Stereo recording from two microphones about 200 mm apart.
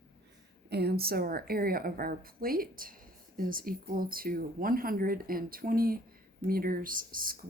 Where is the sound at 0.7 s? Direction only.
55° right (ahead or behind).